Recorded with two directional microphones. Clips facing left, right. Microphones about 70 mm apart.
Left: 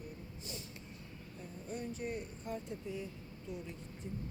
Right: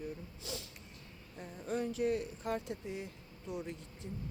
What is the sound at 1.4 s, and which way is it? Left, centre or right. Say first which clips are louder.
Speech: right 6 dB; right.